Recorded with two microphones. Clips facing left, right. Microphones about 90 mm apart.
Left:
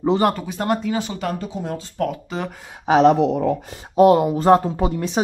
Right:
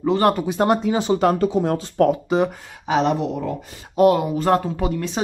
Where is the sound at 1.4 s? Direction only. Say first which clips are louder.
Right 8 dB; 70° right (ahead or behind).